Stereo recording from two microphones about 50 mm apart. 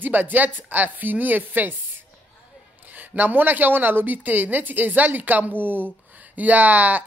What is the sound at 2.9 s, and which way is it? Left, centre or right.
Speech, right.